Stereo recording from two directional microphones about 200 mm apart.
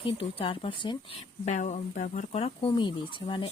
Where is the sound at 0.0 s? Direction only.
25° left (ahead or behind).